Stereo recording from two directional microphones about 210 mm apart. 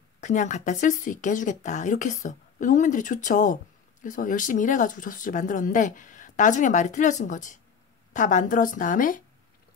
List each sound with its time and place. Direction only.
0.2 s speech: 35° left (ahead or behind)